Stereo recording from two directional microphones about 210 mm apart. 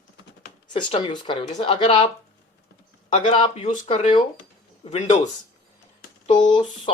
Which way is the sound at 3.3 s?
30° left (ahead or behind).